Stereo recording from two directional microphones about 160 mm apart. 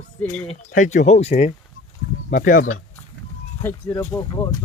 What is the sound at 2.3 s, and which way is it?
Speech, 55° left (ahead or behind).